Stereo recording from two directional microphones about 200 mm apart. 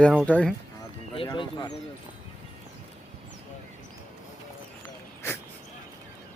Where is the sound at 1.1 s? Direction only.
25° left (ahead or behind).